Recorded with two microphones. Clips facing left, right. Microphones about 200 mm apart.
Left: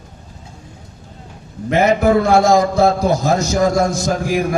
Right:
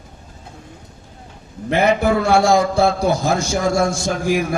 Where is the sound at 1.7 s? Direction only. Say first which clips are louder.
Left 1 dB; 30° right (ahead or behind).